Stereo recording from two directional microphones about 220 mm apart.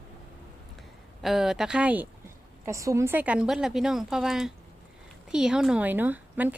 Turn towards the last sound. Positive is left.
turn(degrees=-10)  # may be behind; listen again after turning